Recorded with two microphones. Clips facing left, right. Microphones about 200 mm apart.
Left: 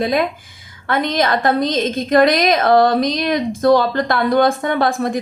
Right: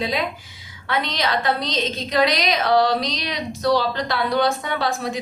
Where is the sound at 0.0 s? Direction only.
50° left (ahead or behind).